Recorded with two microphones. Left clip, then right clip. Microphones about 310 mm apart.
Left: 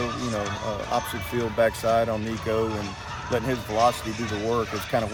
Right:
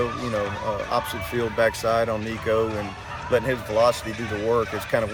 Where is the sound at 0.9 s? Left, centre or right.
Centre.